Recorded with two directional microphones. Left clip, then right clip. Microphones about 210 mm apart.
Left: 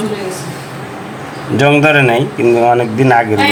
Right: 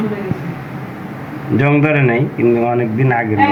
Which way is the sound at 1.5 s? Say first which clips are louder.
Left 5 dB; 25° left (ahead or behind).